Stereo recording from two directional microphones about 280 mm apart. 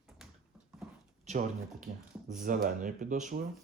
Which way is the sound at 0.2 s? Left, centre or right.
Centre.